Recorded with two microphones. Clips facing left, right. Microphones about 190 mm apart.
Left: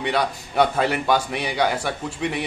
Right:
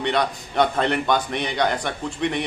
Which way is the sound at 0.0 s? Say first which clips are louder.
Right 1 dB; 5° left (ahead or behind).